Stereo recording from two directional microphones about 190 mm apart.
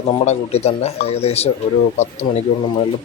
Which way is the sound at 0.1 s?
30° left (ahead or behind).